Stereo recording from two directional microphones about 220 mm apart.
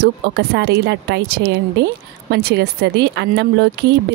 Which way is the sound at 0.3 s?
50° right (ahead or behind).